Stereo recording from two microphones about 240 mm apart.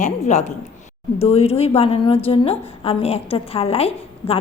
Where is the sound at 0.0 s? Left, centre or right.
Left.